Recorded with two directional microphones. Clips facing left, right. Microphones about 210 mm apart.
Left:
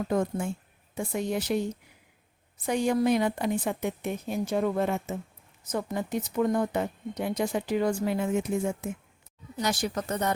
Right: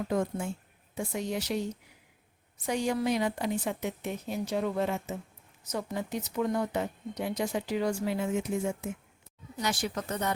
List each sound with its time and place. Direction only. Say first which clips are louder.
0.9 s speech: left 3 dB; 50° left (ahead or behind)
2.6 s speech: left 4 dB; 55° left (ahead or behind)
9.6 s speech: left 3 dB; 40° left (ahead or behind)